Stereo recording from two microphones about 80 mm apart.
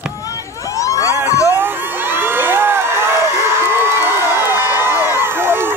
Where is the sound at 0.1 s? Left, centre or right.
Left.